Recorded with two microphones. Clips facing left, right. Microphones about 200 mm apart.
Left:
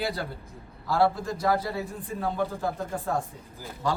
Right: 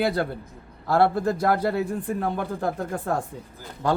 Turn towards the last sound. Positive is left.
turn(degrees=-60)  # may be behind; listen again after turning